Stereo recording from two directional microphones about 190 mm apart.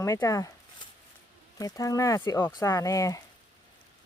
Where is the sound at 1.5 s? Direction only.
20° left (ahead or behind).